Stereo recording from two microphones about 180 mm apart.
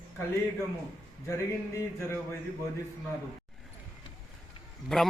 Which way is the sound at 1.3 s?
15° left (ahead or behind).